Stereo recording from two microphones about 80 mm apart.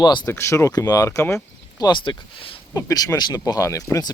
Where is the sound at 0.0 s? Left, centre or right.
Left.